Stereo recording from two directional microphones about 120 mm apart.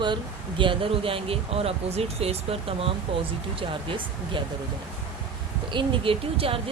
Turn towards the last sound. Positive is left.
turn(degrees=-50)  # may be behind; listen again after turning